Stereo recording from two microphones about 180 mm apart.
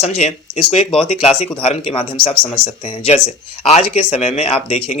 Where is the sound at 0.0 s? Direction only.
35° left (ahead or behind).